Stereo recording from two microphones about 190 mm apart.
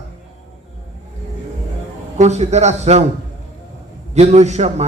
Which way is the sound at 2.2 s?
35° right (ahead or behind).